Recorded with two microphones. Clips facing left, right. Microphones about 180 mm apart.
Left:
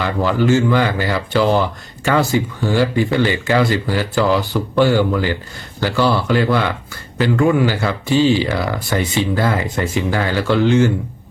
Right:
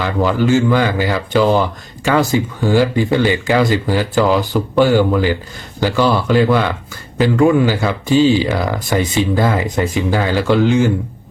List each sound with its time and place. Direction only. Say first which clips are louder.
0.2 s speech: right 1 dB; 20° right (ahead or behind)